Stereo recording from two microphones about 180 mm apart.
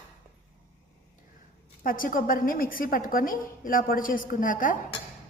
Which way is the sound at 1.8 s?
50° left (ahead or behind).